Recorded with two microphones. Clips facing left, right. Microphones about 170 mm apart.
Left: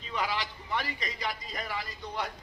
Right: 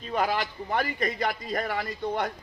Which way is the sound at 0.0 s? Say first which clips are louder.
Right 6 dB; 50° right (ahead or behind).